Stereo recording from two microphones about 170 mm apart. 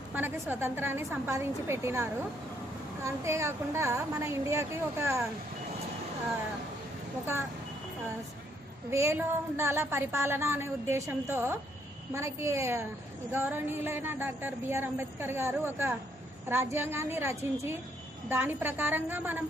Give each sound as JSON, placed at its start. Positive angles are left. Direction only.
{"t": 0.1, "sound": "a woman's voice", "side_deg": -10}
{"t": 8.9, "sound": "a woman's voice", "side_deg": -15}